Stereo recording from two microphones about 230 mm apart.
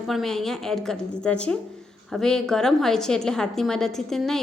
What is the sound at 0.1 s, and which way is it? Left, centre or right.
A woman's voice, centre.